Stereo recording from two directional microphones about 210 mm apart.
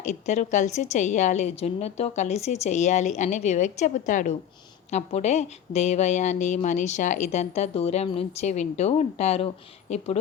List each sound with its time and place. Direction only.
0.0 s a woman's voice: 35° left (ahead or behind)